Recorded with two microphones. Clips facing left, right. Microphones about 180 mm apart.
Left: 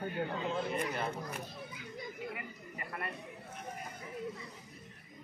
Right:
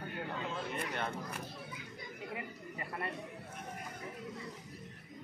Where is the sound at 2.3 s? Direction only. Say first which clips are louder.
Right 2 dB; 25° right (ahead or behind).